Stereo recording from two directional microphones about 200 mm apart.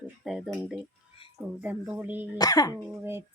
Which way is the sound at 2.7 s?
10° right (ahead or behind).